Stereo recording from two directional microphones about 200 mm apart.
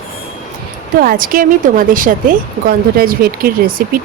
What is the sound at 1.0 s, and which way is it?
A woman's voice, 45° right (ahead or behind).